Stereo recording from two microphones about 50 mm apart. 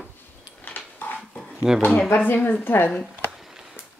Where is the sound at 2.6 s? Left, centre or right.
Left.